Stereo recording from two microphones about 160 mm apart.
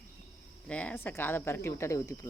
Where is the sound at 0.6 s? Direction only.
10° left (ahead or behind).